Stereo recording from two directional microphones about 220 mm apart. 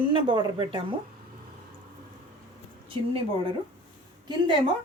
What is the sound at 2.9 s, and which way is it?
Speech, 25° right (ahead or behind).